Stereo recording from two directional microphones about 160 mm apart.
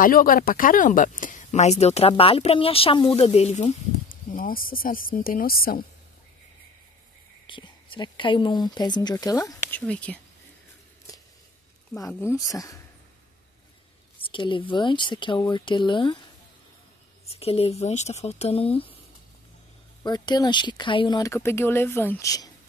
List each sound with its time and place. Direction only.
0.0 s speech: 60° left (ahead or behind); by 3.7 s 40° left (ahead or behind)
4.1 s a woman's voice: 60° left (ahead or behind)
7.4 s speech: 30° left (ahead or behind)
9.7 s speech: 10° left (ahead or behind)
12.1 s speech: 15° left (ahead or behind)
14.2 s speech: 30° left (ahead or behind)
17.3 s speech: 40° left (ahead or behind)
20.0 s speech: 25° left (ahead or behind)